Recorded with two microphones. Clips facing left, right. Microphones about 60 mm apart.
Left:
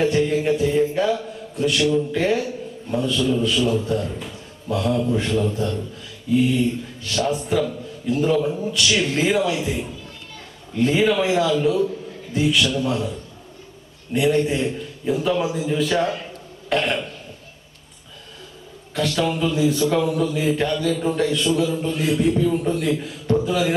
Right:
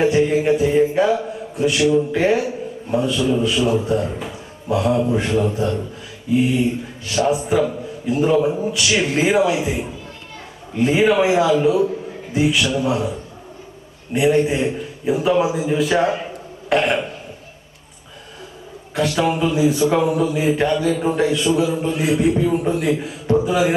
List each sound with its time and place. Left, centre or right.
0.0 s music: centre
0.9 s a man's voice: centre
16.6 s burping: centre
18.9 s a man's voice: centre